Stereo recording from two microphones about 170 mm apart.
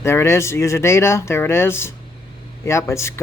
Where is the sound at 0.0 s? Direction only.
15° left (ahead or behind).